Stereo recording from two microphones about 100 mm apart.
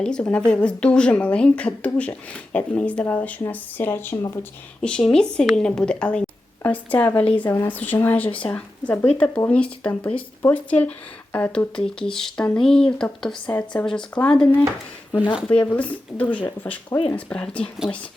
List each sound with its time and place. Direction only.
0.0 s speech: 10° left (ahead or behind)
4.8 s speech: 10° left (ahead or behind)
13.5 s speech: 20° left (ahead or behind)
13.8 s speech: 10° left (ahead or behind)
15.1 s speech: 50° left (ahead or behind)
15.4 s speech: 15° left (ahead or behind)